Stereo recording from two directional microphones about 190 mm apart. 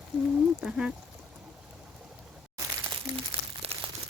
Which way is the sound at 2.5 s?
25° right (ahead or behind).